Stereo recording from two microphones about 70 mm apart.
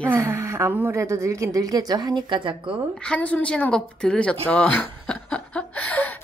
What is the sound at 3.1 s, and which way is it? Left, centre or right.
A woman's voice, left.